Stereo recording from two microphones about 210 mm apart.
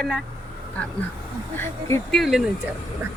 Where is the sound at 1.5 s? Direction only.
10° left (ahead or behind).